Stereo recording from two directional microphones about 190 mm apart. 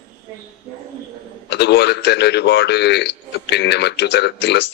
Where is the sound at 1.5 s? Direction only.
60° left (ahead or behind).